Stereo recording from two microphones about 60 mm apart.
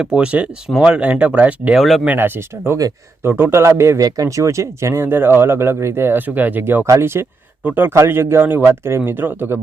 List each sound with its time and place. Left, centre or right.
0.0 s speech: centre
1.7 s speech: centre
2.0 s a man's voice: right
4.0 s speech: right
5.0 s speech: right
7.0 s a man's voice: right
7.6 s speech: right
8.0 s speech: right